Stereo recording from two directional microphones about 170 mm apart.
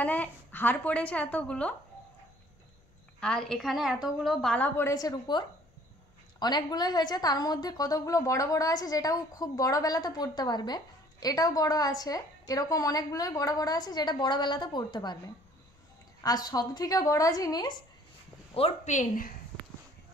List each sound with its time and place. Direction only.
0.0 s a woman's voice: 10° left (ahead or behind)
3.2 s a woman's voice: 5° left (ahead or behind); by 5.4 s 20° left (ahead or behind)
6.4 s a woman's voice: 25° left (ahead or behind)
18.5 s a woman's voice: 40° left (ahead or behind)